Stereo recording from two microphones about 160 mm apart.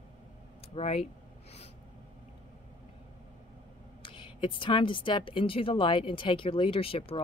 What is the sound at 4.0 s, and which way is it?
Speech, 30° left (ahead or behind).